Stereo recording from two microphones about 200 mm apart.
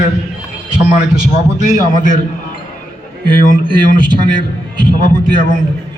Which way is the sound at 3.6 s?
25° right (ahead or behind).